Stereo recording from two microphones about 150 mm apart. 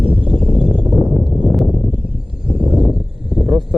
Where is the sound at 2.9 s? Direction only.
Centre (ahead or behind).